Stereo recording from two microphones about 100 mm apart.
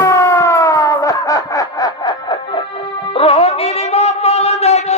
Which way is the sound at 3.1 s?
70° left (ahead or behind).